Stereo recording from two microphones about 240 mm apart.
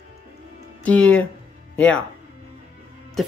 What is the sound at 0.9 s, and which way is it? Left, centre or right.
Speech, centre.